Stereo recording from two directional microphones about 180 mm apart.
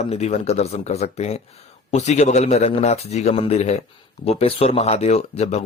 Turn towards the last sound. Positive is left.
turn(degrees=35)  # may be behind; listen again after turning